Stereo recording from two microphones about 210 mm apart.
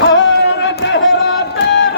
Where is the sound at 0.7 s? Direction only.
55° left (ahead or behind).